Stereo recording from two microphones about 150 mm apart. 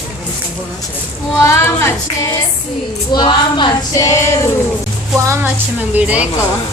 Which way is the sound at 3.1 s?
30° left (ahead or behind).